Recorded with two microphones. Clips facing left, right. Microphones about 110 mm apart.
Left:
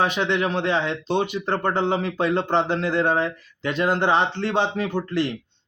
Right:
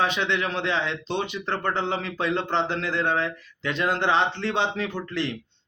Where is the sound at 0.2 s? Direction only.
35° left (ahead or behind).